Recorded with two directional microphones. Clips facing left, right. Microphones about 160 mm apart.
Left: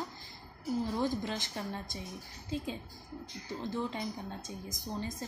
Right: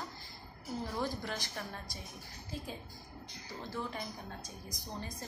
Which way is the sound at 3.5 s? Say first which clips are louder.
Left 6 dB; 20° left (ahead or behind).